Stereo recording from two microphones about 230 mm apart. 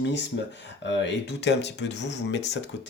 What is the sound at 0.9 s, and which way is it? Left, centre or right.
Speech, left.